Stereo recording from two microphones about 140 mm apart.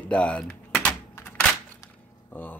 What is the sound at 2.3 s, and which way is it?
Speech, 15° left (ahead or behind).